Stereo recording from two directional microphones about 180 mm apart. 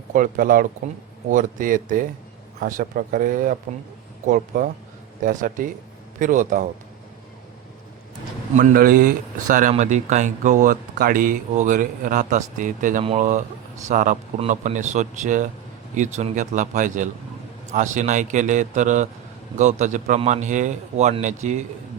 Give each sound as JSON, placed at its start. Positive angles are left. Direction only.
{"t": 0.1, "sound": "speech", "side_deg": -50}
{"t": 8.5, "sound": "a man's voice", "side_deg": -55}